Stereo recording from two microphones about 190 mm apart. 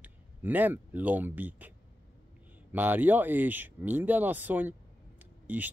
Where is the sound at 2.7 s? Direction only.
10° right (ahead or behind).